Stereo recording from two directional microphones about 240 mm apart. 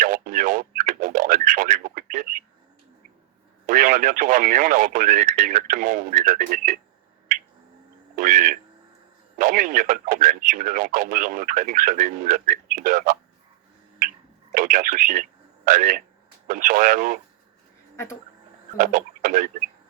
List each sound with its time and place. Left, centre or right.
0.0 s radio: right
3.7 s speech: right
8.1 s a sound: right
9.4 s speech: right
14.5 s speech: right
17.9 s insect: centre
18.8 s speech: right